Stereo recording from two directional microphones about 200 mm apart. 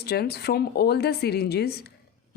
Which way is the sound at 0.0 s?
50° left (ahead or behind).